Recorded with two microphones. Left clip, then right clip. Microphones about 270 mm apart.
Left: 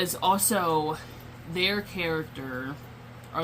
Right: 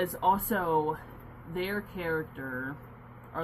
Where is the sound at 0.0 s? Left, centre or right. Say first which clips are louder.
Left 2 dB; centre.